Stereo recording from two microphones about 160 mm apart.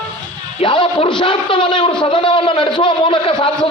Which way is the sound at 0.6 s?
35° left (ahead or behind).